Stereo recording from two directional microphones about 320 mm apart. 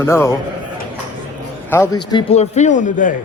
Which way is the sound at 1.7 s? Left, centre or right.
Centre.